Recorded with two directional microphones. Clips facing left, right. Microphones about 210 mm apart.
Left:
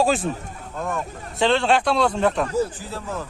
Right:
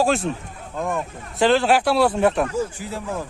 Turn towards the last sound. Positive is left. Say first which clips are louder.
# right 2 dB
turn(degrees=-15)  # may be behind; listen again after turning